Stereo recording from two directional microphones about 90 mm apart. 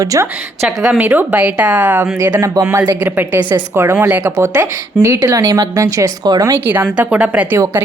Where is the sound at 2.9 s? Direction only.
25° right (ahead or behind).